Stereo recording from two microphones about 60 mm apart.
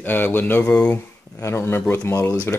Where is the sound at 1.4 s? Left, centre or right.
Left.